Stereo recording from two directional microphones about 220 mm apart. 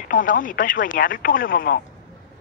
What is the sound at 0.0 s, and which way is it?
Speech, 35° left (ahead or behind).